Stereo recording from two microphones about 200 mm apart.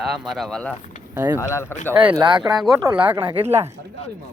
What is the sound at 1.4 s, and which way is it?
Speech, 15° left (ahead or behind).